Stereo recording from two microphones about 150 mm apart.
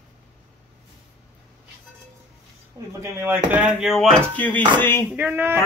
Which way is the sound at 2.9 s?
20° right (ahead or behind).